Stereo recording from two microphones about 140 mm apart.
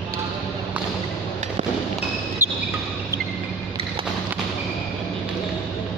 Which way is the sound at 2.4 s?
15° right (ahead or behind).